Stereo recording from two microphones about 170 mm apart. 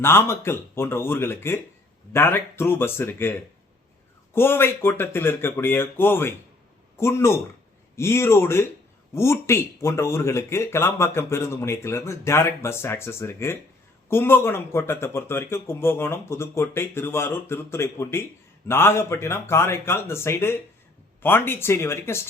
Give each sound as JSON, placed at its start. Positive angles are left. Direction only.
{"t": 0.0, "sound": "speech", "side_deg": 15}
{"t": 4.4, "sound": "speech", "side_deg": 15}